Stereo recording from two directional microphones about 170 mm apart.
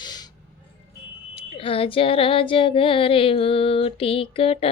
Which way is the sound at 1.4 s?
35° left (ahead or behind).